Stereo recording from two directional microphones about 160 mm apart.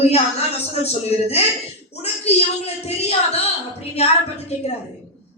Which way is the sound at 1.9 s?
40° left (ahead or behind).